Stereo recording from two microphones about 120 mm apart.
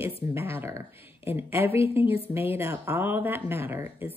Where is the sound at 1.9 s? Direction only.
15° right (ahead or behind).